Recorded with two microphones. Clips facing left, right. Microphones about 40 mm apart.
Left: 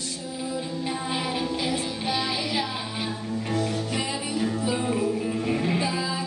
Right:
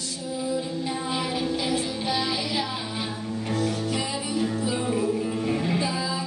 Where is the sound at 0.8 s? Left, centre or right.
Centre.